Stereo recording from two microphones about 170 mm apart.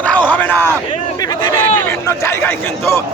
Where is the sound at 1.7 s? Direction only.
15° left (ahead or behind).